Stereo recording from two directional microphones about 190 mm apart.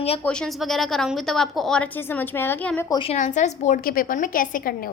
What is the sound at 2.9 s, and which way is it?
Speech, 25° left (ahead or behind).